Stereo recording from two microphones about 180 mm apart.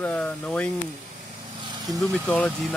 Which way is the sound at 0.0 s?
10° left (ahead or behind).